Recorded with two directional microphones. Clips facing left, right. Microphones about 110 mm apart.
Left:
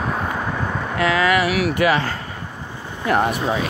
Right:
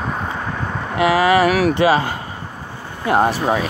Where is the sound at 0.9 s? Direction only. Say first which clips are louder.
Right 4 dB; 25° right (ahead or behind).